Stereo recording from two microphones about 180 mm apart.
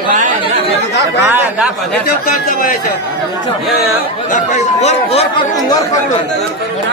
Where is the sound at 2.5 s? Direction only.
50° left (ahead or behind).